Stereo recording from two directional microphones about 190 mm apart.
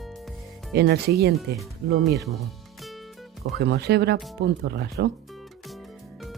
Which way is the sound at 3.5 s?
60° right (ahead or behind).